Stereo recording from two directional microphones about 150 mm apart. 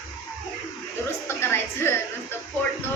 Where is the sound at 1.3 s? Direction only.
15° left (ahead or behind).